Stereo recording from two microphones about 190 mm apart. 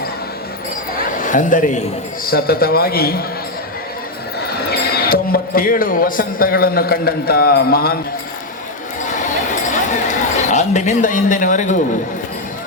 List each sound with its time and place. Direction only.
1.2 s speech: 40° left (ahead or behind)
2.2 s a man's voice: 55° left (ahead or behind)
4.4 s speech: 55° left (ahead or behind)
9.0 s a sound: 40° left (ahead or behind)